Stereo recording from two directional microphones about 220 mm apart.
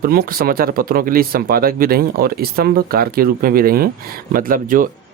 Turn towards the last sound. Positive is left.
turn(degrees=-40)  # may be behind; listen again after turning